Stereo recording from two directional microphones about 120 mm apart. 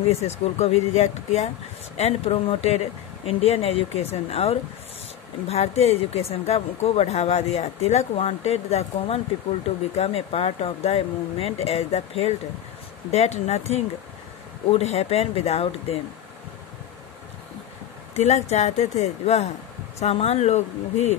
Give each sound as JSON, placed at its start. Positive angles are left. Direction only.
{"t": 0.1, "sound": "speech", "side_deg": 65}
{"t": 18.1, "sound": "speech", "side_deg": 65}